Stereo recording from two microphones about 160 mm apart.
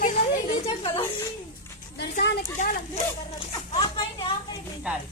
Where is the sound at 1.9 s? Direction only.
90° left.